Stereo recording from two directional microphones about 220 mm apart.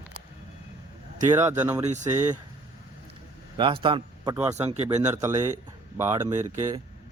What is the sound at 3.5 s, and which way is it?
Speech, 25° right (ahead or behind).